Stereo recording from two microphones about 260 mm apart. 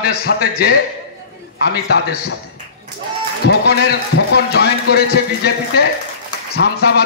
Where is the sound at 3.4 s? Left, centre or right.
Left.